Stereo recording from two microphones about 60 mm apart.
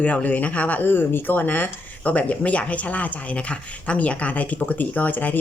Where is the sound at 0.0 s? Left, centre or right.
Left.